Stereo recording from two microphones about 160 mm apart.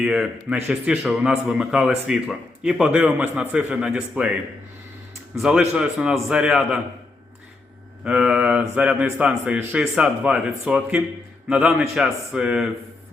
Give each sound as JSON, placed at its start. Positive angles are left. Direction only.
{"t": 0.0, "sound": "speech", "side_deg": -5}
{"t": 5.4, "sound": "speech", "side_deg": -5}
{"t": 8.0, "sound": "speech", "side_deg": -5}